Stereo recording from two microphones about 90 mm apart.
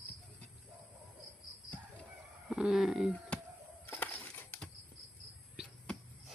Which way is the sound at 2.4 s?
5° right (ahead or behind).